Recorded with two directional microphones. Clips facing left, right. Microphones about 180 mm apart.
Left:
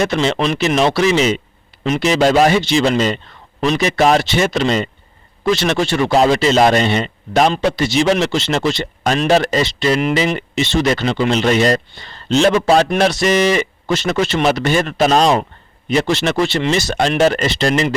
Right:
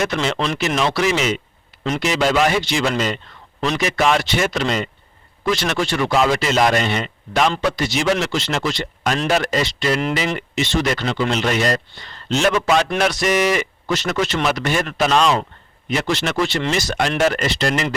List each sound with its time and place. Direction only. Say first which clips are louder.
0.0 s speech: left 4 dB; 25° left (ahead or behind)
4.3 s speech: left 4 dB; 30° left (ahead or behind)